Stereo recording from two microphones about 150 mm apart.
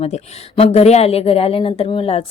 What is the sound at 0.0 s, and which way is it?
A woman's voice, 40° left (ahead or behind).